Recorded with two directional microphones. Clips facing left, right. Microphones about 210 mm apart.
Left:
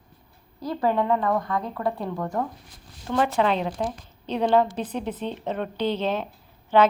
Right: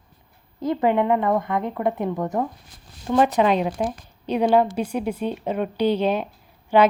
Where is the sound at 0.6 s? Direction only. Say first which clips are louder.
Right 4 dB; 20° right (ahead or behind).